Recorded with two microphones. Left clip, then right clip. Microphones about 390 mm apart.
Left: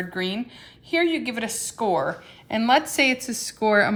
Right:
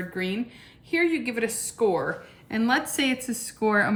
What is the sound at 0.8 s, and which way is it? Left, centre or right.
A woman's voice, centre.